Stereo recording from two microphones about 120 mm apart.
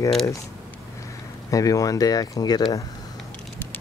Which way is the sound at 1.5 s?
30° left (ahead or behind).